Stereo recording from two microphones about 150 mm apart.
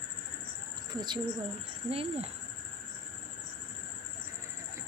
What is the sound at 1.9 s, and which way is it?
Speech, 40° right (ahead or behind).